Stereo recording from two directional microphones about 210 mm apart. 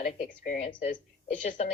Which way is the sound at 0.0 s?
40° left (ahead or behind).